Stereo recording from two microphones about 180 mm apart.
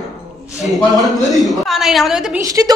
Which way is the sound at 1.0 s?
Centre (ahead or behind).